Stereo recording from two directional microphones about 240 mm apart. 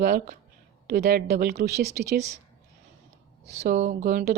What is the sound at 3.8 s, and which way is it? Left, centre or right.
Speech, right.